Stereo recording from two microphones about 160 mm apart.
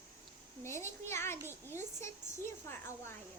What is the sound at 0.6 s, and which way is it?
A child's voice, 15° left (ahead or behind).